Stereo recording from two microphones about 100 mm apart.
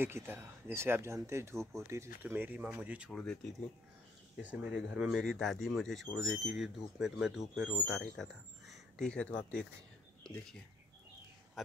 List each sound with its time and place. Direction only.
0.0 s speech: 20° right (ahead or behind)
3.1 s speech: 10° left (ahead or behind)
4.4 s speech: 15° right (ahead or behind); by 9.7 s 10° left (ahead or behind)
11.6 s speech: centre (ahead or behind)